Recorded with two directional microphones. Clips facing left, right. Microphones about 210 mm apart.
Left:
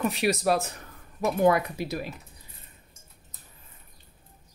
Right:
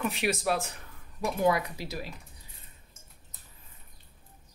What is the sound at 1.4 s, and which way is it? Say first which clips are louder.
Speech: left 4 dB; 55° left (ahead or behind).